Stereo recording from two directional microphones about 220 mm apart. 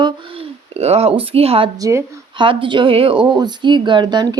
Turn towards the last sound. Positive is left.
turn(degrees=-20)  # may be behind; listen again after turning